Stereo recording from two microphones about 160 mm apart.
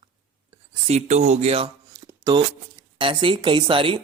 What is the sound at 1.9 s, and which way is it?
Speech, 20° right (ahead or behind).